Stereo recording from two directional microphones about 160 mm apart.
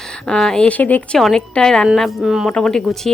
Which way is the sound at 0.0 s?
5° left (ahead or behind).